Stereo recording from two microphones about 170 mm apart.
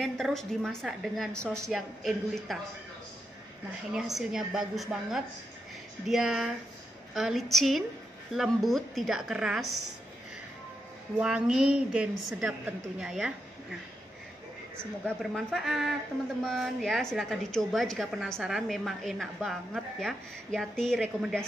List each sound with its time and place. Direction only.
0.0 s a woman's voice: centre (ahead or behind)
3.9 s a woman's voice: 5° right (ahead or behind)
11.1 s a woman's voice: 5° right (ahead or behind)
15.3 s a woman's voice: centre (ahead or behind)